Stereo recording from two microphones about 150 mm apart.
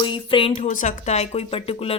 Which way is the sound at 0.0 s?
35° left (ahead or behind).